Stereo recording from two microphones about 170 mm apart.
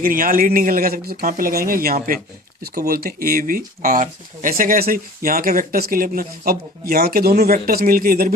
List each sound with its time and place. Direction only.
0.0 s speech: 55° right (ahead or behind)